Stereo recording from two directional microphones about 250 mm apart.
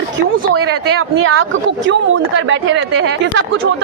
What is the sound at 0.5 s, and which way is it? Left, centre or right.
Speech, right.